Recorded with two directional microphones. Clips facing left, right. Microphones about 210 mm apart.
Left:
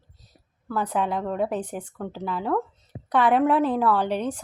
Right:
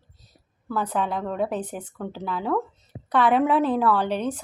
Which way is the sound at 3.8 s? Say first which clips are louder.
Even; 10° left (ahead or behind).